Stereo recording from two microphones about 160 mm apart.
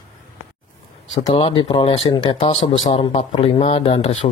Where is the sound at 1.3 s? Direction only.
35° left (ahead or behind).